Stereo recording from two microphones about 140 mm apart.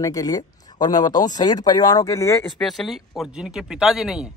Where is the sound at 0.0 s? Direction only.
25° left (ahead or behind).